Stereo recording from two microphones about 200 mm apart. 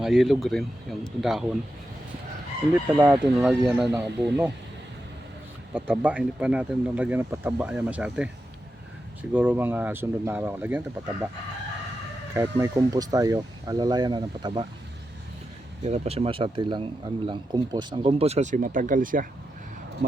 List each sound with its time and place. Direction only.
0.0 s speech: centre (ahead or behind)
3.0 s speech: 5° right (ahead or behind)
5.7 s speech: 5° right (ahead or behind)
9.3 s speech: 10° right (ahead or behind)
12.3 s speech: 15° right (ahead or behind)
15.8 s speech: 30° right (ahead or behind)